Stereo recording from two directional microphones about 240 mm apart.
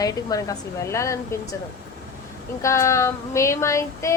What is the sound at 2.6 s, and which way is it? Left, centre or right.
A woman's voice, centre.